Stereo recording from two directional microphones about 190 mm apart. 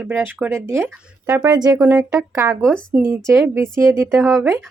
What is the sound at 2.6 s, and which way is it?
Speech, 5° left (ahead or behind).